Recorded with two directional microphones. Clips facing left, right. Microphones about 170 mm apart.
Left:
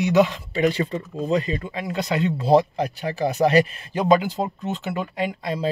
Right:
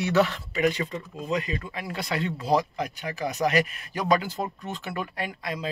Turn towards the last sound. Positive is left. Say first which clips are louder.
# left 7 dB
turn(degrees=20)  # may be behind; listen again after turning